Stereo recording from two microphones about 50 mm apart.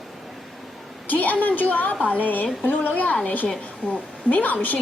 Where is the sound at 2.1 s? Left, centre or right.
Left.